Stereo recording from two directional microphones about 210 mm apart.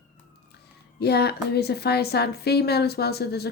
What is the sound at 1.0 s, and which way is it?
Speech, 50° left (ahead or behind).